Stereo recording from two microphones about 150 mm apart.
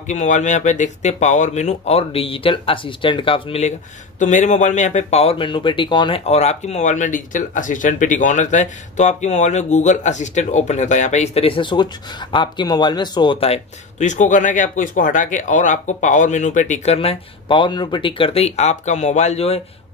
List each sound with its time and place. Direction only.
0.0 s speech: 55° left (ahead or behind)
4.2 s speech: 55° left (ahead or behind)